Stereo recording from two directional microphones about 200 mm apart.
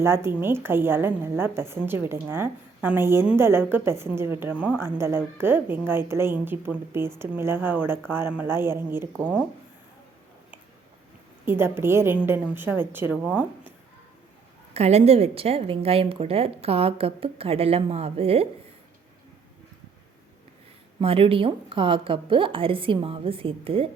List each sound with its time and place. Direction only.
0.0 s a woman's voice: 10° right (ahead or behind)
11.4 s a woman's voice: 10° right (ahead or behind)
14.7 s a woman's voice: 30° right (ahead or behind)
21.0 s a woman's voice: 30° right (ahead or behind)